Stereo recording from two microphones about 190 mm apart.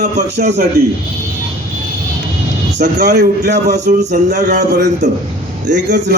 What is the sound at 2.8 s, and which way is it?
Speech, 60° right (ahead or behind).